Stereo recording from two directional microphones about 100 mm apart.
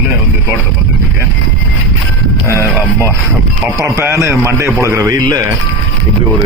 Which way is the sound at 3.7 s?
30° right (ahead or behind).